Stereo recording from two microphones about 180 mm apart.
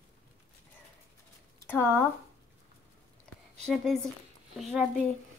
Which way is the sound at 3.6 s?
Centre (ahead or behind).